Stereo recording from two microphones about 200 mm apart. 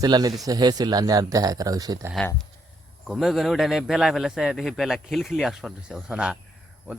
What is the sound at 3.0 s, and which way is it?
A man's voice, centre (ahead or behind).